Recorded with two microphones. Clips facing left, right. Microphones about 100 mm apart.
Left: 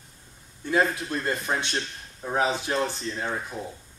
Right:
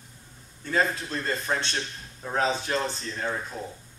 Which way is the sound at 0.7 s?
15° left (ahead or behind).